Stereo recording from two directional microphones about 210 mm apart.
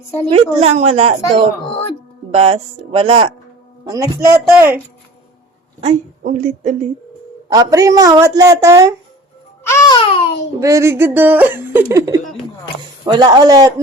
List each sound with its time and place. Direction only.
0.3 s a woman's voice: 30° right (ahead or behind)
3.8 s a woman's voice: 15° right (ahead or behind)
5.8 s a woman's voice: 35° right (ahead or behind)
7.5 s a woman's voice: 15° right (ahead or behind)
9.6 s music: 15° left (ahead or behind)
10.6 s a woman's voice: 15° right (ahead or behind)